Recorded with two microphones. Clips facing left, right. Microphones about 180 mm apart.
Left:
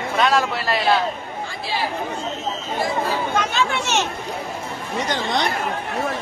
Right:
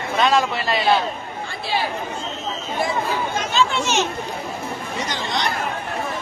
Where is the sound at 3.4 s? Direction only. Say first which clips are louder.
Right 1 dB; 65° left (ahead or behind).